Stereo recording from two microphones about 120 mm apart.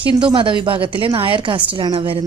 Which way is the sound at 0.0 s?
45° right (ahead or behind).